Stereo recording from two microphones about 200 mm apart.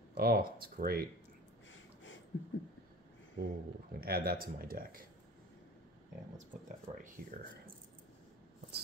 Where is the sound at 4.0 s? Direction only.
50° right (ahead or behind).